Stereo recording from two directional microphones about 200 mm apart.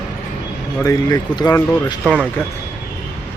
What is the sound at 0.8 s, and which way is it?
Speech, 15° left (ahead or behind).